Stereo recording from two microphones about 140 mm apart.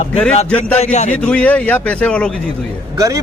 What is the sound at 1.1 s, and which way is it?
A man's voice, 10° left (ahead or behind).